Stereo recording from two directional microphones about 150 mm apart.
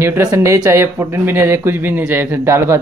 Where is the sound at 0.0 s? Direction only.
15° right (ahead or behind).